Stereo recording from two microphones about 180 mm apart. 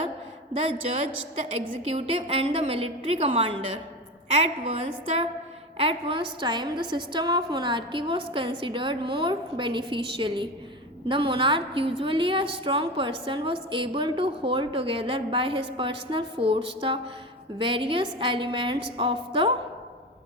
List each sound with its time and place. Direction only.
1.8 s a woman's voice: 35° right (ahead or behind)